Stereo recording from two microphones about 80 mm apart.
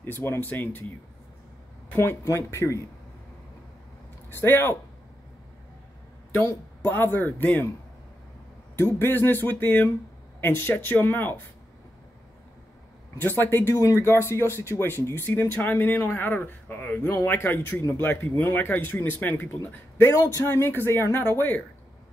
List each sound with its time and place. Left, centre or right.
0.0 s speech: left
2.2 s speech: left
4.3 s speech: left
6.4 s speech: left
8.7 s speech: left
13.2 s speech: left